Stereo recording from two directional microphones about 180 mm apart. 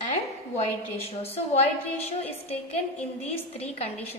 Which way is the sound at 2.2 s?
35° left (ahead or behind).